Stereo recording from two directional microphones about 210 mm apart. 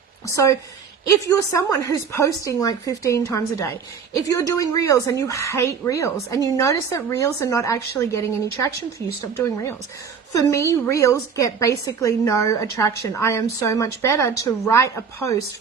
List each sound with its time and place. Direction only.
0.3 s speech: 15° left (ahead or behind)
9.4 s speech: 15° left (ahead or behind)